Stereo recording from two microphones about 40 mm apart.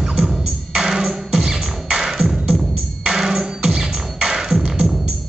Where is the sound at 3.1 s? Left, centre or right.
Centre.